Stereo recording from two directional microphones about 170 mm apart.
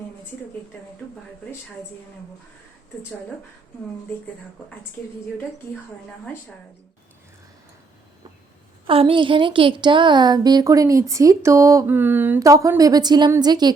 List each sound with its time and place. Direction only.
1.0 s speech: 5° left (ahead or behind)
8.9 s a woman's voice: 30° right (ahead or behind)